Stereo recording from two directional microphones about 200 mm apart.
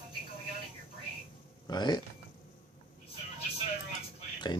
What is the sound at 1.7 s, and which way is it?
Speech, 20° left (ahead or behind).